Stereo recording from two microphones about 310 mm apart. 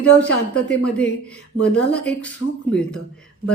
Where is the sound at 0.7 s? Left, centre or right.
Centre.